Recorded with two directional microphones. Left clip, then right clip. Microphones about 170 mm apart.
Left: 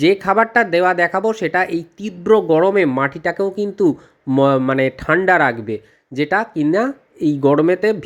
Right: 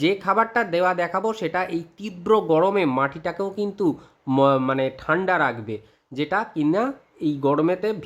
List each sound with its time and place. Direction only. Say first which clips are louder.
0.0 s speech: left 6 dB; 20° left (ahead or behind)